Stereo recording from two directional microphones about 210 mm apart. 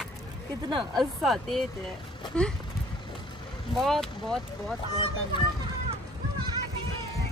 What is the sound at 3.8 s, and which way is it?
Speech, centre (ahead or behind).